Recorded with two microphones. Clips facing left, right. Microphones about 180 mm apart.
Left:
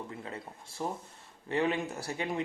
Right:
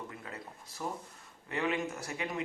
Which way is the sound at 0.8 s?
25° left (ahead or behind).